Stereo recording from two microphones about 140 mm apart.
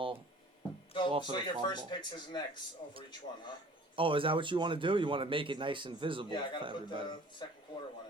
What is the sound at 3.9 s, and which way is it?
Speech, 40° right (ahead or behind).